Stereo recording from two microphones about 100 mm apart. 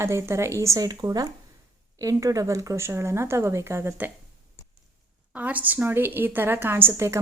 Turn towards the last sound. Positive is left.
turn(degrees=-25)  # may be behind; listen again after turning